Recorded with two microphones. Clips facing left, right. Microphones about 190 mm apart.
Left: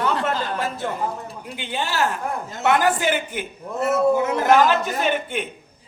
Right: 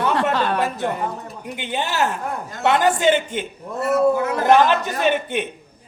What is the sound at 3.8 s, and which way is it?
Speech, 25° left (ahead or behind).